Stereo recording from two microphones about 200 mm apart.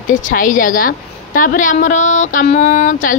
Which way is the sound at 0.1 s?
40° left (ahead or behind).